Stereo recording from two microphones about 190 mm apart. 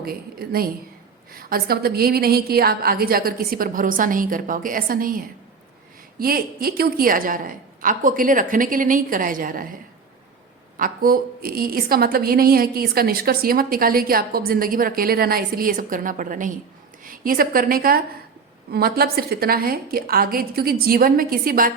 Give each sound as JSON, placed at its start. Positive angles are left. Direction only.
{"t": 0.0, "sound": "a woman's voice", "side_deg": -55}
{"t": 10.8, "sound": "a woman's voice", "side_deg": -50}